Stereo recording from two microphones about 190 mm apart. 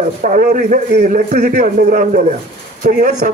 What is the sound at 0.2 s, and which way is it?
A man's voice, 45° right (ahead or behind).